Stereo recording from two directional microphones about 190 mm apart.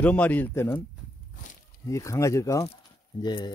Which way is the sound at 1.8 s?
15° left (ahead or behind).